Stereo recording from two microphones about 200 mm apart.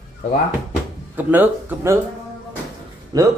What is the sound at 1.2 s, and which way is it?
Speech, 10° right (ahead or behind).